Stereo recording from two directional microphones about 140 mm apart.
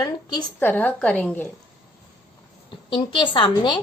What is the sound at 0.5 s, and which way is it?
Speech, 15° left (ahead or behind).